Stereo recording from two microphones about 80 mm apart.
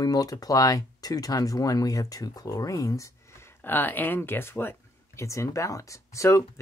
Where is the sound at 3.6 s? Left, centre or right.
Left.